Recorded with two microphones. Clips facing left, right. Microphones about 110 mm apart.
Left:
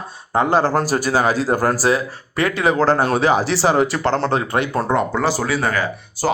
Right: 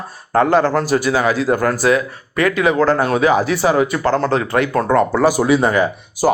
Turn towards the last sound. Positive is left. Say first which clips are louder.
# right 5 dB
turn(degrees=-20)  # may be behind; listen again after turning